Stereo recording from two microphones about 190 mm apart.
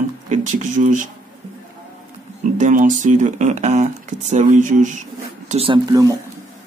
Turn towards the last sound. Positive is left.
turn(degrees=-20)  # may be behind; listen again after turning